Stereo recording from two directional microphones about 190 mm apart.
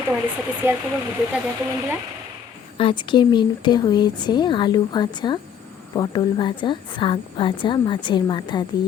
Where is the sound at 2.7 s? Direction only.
25° left (ahead or behind).